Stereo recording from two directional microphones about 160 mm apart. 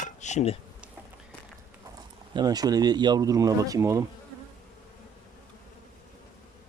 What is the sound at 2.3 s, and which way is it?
Speech, 25° right (ahead or behind).